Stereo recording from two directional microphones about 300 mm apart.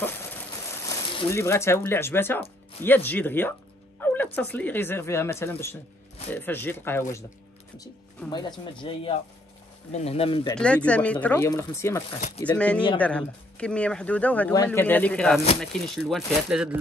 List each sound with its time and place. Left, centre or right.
0.8 s speech: centre
10.5 s speech: centre